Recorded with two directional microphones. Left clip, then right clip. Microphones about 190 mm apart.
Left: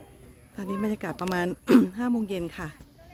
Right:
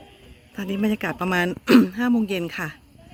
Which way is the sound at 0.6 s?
5° right (ahead or behind).